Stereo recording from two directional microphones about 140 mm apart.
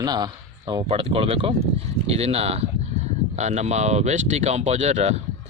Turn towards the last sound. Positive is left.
turn(degrees=-50)  # may be behind; listen again after turning